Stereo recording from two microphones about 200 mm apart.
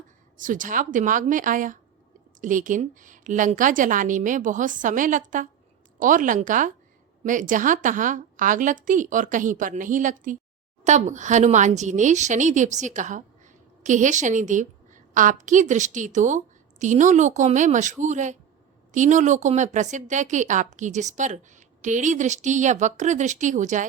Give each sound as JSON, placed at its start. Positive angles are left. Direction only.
{"t": 0.3, "sound": "a woman's voice", "side_deg": -40}